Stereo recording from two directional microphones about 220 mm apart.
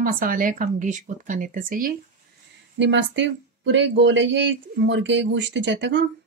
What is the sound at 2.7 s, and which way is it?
Speech, 55° right (ahead or behind).